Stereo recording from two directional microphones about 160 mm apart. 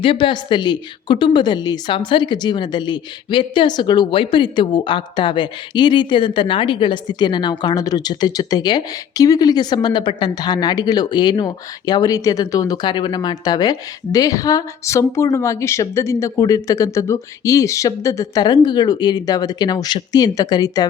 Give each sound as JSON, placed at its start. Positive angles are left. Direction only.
{"t": 0.0, "sound": "a woman's voice", "side_deg": 30}